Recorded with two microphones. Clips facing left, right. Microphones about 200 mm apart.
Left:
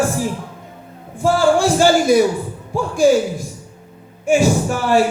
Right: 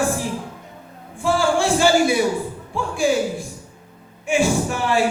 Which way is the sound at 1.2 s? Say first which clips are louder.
Left 4 dB; 40° left (ahead or behind).